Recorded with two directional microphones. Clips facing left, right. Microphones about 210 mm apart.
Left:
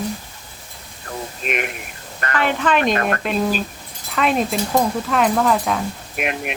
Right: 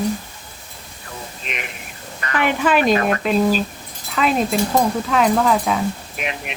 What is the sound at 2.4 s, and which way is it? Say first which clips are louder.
Speech: right 2 dB; 10° right (ahead or behind).